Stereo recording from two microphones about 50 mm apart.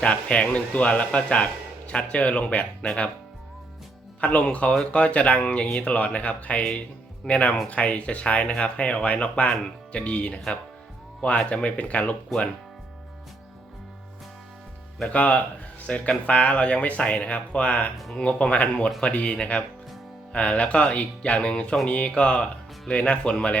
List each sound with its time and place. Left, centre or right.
0.0 s speech: left
4.2 s speech: left
15.1 s speech: left
17.9 s speech: centre
18.2 s speech: left